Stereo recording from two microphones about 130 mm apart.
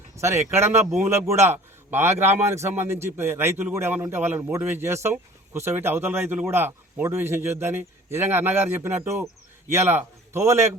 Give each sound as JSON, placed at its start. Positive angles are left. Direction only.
{"t": 0.2, "sound": "a man's voice", "side_deg": -20}